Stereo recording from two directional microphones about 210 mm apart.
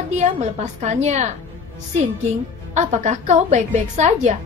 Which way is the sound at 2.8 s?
35° right (ahead or behind).